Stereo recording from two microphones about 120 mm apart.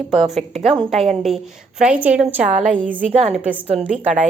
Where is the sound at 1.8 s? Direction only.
10° right (ahead or behind).